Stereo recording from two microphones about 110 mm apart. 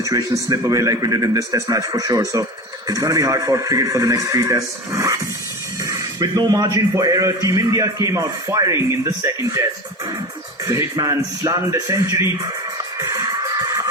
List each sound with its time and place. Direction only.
0.0 s a man's voice: 30° right (ahead or behind)
10.7 s a man's voice: 30° right (ahead or behind)
13.0 s a sound: 35° right (ahead or behind)